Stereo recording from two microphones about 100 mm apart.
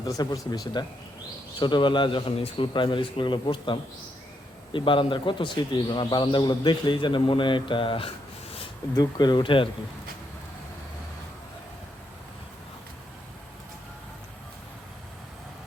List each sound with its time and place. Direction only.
0.0 s speech: 40° left (ahead or behind); by 8.1 s 60° left (ahead or behind)
9.0 s speech: 45° left (ahead or behind)